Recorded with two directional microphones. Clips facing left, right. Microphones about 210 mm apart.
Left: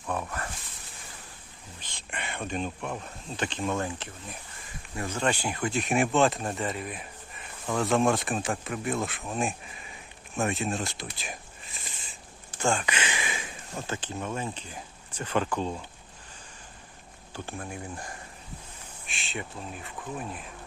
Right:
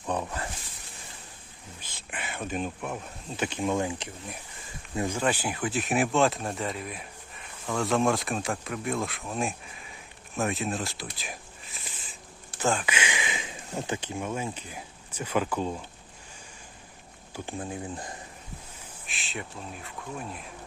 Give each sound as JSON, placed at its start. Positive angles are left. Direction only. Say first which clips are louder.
{"t": 0.0, "sound": "a sound", "louder": "right 2 dB", "side_deg": -20}
{"t": 1.8, "sound": "speech", "louder": "left 1 dB", "side_deg": -5}
{"t": 17.3, "sound": "speech", "louder": "right 3 dB", "side_deg": -15}
{"t": 19.0, "sound": "speech", "louder": "left 1 dB", "side_deg": 0}